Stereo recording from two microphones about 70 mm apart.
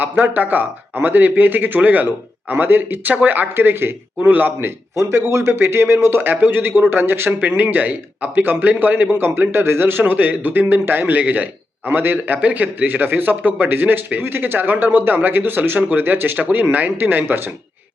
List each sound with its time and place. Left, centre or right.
0.0 s a man's voice: right
4.9 s a man's voice: right
9.2 s a man's voice: right